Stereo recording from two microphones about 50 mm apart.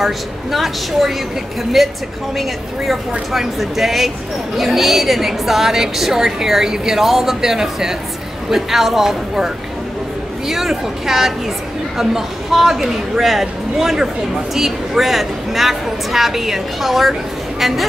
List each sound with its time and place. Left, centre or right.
0.0 s a woman's voice: centre
10.5 s a woman's voice: centre